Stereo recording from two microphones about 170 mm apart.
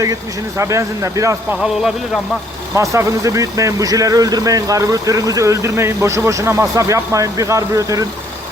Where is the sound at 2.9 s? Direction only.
20° right (ahead or behind).